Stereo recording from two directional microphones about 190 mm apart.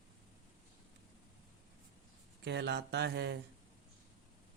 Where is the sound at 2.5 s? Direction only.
65° right (ahead or behind).